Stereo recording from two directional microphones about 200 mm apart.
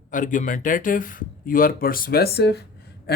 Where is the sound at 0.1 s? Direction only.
40° left (ahead or behind).